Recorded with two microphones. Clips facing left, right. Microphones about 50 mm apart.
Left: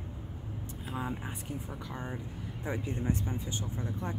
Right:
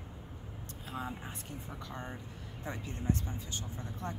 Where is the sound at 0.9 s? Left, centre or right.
Centre.